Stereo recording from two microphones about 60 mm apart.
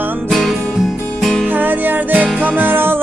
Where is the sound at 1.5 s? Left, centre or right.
Right.